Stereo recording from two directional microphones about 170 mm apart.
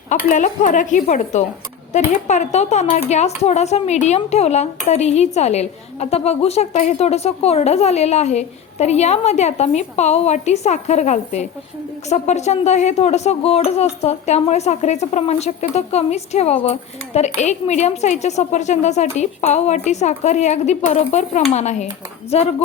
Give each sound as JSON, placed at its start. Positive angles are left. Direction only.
{"t": 0.3, "sound": "speech", "side_deg": 45}